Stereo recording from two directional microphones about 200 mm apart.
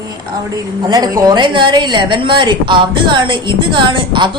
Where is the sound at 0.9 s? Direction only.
20° right (ahead or behind).